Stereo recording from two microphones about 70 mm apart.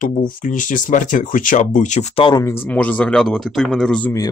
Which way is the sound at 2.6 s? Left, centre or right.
Left.